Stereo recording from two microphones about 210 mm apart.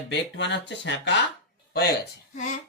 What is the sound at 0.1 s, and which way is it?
Speech, 55° left (ahead or behind).